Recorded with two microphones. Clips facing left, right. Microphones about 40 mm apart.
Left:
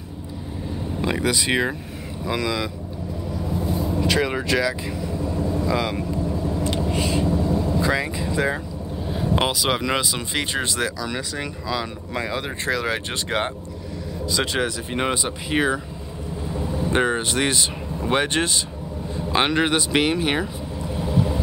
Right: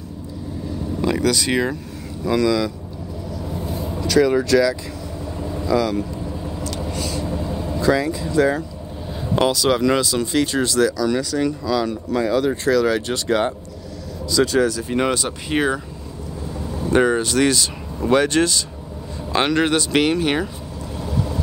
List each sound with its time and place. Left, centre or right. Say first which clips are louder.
1.0 s speech: right 3 dB; left
3.6 s vehicle: left 3 dB; centre
4.0 s speech: right 8 dB; left
6.9 s vehicle: left 3 dB; left
7.4 s vehicle: left 4 dB; right
7.8 s speech: right 4 dB; left
15.5 s speech: right 1 dB; centre
16.6 s speech: right 4 dB; left
20.9 s vehicle: left 2 dB; left